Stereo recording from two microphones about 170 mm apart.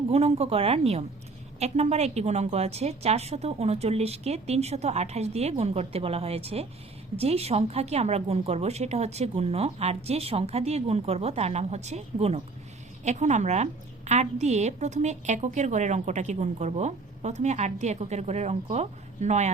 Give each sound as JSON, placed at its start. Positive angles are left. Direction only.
{"t": 0.1, "sound": "a woman's voice", "side_deg": -40}